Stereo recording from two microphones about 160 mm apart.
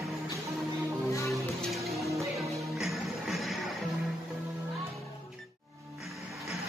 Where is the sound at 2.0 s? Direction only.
20° right (ahead or behind).